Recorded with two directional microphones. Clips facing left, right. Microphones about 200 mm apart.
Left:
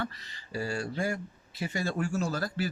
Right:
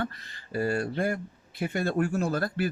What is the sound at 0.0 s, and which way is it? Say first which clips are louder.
Speech: right 3 dB; 50° right (ahead or behind).